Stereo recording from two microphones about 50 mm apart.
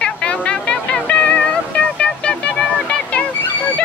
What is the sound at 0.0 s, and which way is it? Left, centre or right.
Music, left.